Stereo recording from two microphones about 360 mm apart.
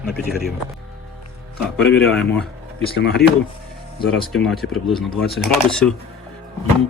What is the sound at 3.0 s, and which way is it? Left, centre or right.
Speech, left.